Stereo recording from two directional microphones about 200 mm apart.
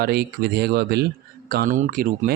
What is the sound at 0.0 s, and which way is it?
Speech, 50° right (ahead or behind).